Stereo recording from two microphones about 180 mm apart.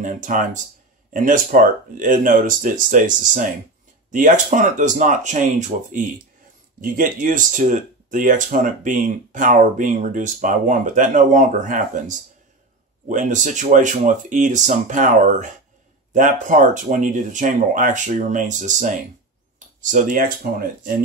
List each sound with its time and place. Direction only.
0.0 s speech: 45° right (ahead or behind)